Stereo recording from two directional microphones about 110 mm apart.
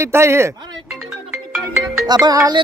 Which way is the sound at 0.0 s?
25° right (ahead or behind).